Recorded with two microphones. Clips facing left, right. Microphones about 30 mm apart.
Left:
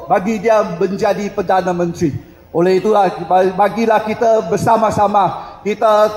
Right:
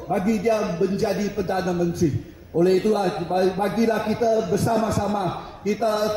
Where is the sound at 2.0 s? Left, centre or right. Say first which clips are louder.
Left 5 dB; left.